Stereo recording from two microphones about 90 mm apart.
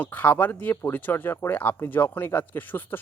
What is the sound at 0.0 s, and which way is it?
Speech, 20° left (ahead or behind).